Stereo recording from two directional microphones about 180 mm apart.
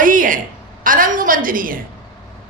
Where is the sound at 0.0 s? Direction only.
50° right (ahead or behind).